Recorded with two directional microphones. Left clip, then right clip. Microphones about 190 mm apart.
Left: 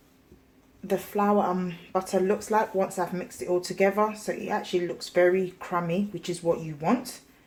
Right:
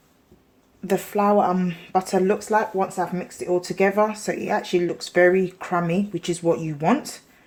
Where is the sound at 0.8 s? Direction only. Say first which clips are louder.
Right 5 dB; 45° right (ahead or behind).